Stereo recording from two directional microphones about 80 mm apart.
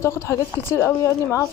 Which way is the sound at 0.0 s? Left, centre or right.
Left.